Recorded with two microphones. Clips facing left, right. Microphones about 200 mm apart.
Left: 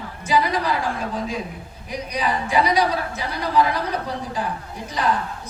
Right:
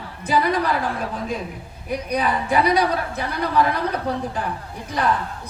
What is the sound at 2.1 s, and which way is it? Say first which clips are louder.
A woman's voice: right 2 dB; 55° right (ahead or behind).